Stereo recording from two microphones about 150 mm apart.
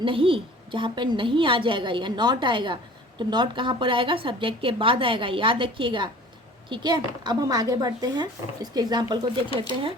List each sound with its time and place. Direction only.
0.0 s a woman's voice: 35° right (ahead or behind)